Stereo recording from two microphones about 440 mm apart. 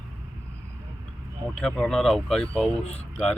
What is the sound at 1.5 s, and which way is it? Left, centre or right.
Speech, centre.